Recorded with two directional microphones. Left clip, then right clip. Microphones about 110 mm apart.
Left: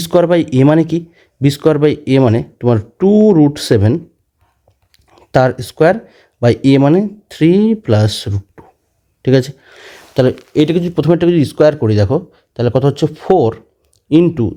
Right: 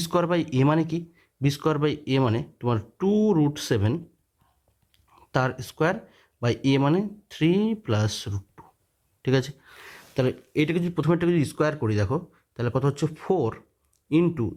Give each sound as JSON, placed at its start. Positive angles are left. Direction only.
{"t": 0.0, "sound": "speech", "side_deg": 30}